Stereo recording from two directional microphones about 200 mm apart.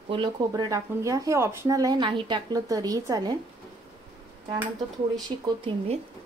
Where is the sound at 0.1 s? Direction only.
20° right (ahead or behind).